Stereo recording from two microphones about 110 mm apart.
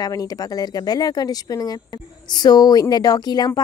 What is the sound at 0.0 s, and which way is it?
Speech, 35° left (ahead or behind).